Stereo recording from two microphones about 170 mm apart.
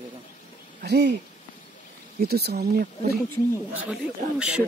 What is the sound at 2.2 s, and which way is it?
Speech, 70° right (ahead or behind).